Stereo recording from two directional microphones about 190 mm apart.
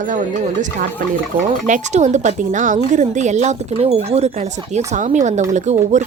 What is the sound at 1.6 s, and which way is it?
A woman's voice, 40° right (ahead or behind).